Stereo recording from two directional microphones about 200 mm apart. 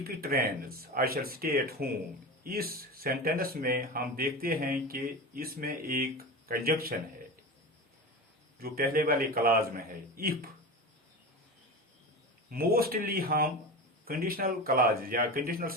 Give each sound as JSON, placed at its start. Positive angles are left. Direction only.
{"t": 0.0, "sound": "speech", "side_deg": -50}
{"t": 8.5, "sound": "speech", "side_deg": -50}
{"t": 12.5, "sound": "speech", "side_deg": -50}